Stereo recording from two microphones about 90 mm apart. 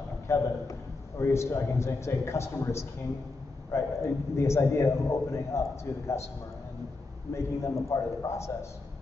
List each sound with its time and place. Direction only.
0.3 s a man's voice: 35° left (ahead or behind)
7.3 s a man's voice: 30° left (ahead or behind)